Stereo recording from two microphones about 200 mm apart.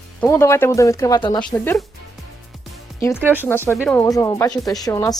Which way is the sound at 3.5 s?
10° left (ahead or behind).